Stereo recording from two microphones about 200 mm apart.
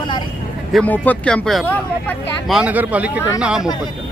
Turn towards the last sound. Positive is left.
turn(degrees=-5)  # may be behind; listen again after turning